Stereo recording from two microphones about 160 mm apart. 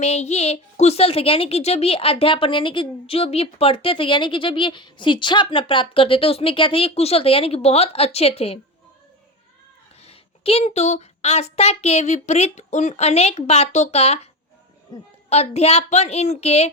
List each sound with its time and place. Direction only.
0.0 s a woman's voice: 40° left (ahead or behind)
10.1 s a woman's voice: 40° left (ahead or behind)
15.3 s a woman's voice: 40° left (ahead or behind)